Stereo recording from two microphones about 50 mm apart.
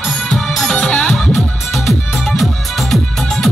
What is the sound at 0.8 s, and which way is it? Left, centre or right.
Music, left.